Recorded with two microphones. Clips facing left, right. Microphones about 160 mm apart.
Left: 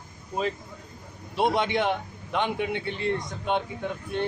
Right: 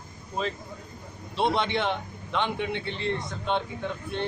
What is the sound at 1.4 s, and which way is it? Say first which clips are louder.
Speech: left 2 dB; 10° left (ahead or behind).